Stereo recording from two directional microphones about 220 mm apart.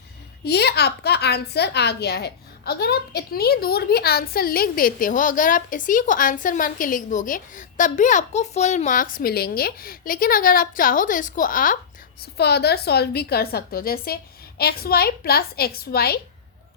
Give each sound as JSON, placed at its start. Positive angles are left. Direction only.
{"t": 0.4, "sound": "a woman's voice", "side_deg": 50}